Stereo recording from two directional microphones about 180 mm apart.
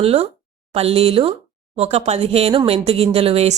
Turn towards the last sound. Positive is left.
turn(degrees=-35)  # may be behind; listen again after turning